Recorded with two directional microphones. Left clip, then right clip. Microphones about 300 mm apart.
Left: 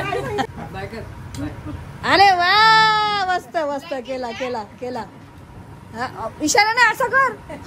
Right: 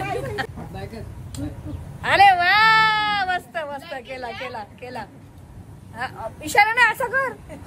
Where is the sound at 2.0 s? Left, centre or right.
Centre.